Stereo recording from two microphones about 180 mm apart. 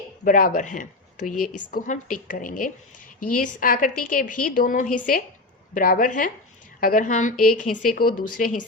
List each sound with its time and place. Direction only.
0.3 s speech: 50° left (ahead or behind)